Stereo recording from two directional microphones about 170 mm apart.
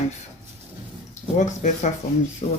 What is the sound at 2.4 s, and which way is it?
Speech, 35° left (ahead or behind).